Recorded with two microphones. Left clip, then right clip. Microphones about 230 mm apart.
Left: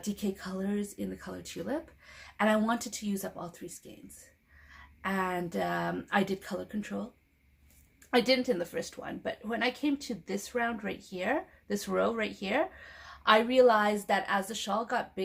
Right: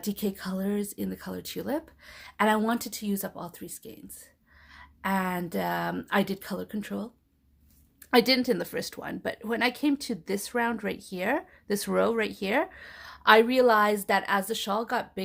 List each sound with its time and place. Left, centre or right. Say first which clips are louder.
0.0 s speech: right 4 dB; right
8.1 s a woman's voice: right 4 dB; right